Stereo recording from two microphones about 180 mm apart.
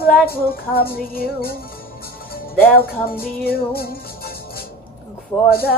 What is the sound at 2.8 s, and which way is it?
Music, 60° left (ahead or behind).